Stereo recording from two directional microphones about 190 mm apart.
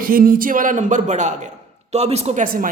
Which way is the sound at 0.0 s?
50° right (ahead or behind).